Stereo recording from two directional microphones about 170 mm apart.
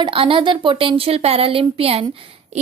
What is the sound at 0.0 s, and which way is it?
A woman's voice, 30° right (ahead or behind).